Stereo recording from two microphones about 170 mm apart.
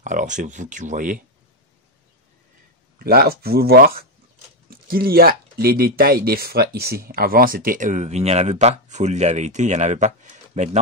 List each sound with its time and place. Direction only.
0.0 s speech: 45° right (ahead or behind)
3.0 s speech: 60° right (ahead or behind); by 10.8 s 45° right (ahead or behind)